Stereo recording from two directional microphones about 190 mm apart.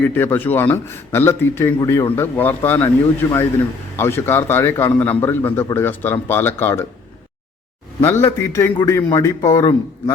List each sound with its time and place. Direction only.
0.0 s a man's voice: 10° left (ahead or behind)
8.0 s a man's voice: 15° left (ahead or behind)